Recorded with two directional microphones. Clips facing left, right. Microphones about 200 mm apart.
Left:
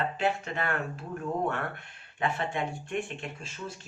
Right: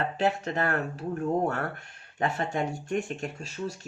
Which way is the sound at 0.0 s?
40° right (ahead or behind).